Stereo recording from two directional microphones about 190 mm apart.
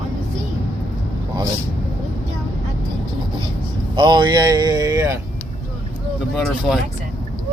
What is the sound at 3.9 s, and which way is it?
Speech, 25° right (ahead or behind).